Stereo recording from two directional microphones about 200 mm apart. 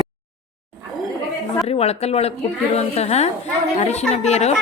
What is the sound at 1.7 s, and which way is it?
A woman's voice, 30° left (ahead or behind).